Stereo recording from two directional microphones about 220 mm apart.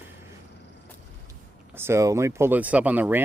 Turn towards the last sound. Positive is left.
turn(degrees=-10)  # may be behind; listen again after turning